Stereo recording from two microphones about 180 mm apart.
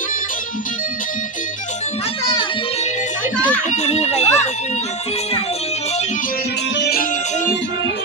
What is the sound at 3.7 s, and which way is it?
Speech, 35° left (ahead or behind).